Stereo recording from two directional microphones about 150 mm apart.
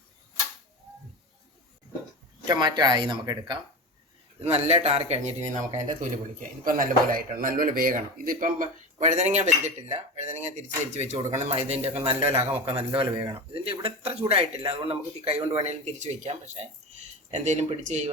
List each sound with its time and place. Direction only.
2.5 s speech: 25° right (ahead or behind)
4.4 s speech: 45° right (ahead or behind)
6.7 s a man's voice: 70° right (ahead or behind); by 18.1 s 50° right (ahead or behind)